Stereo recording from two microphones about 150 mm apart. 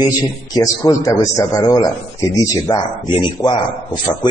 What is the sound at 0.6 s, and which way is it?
A man's voice, 25° left (ahead or behind).